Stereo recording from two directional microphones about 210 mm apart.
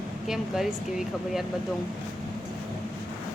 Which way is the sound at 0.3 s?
Centre (ahead or behind).